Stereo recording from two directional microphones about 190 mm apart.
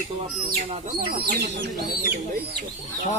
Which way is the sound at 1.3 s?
60° right (ahead or behind).